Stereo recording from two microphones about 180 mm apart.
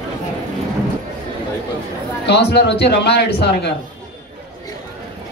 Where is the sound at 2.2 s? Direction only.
70° left (ahead or behind).